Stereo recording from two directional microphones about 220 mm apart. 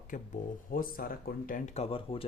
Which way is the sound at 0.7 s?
40° left (ahead or behind).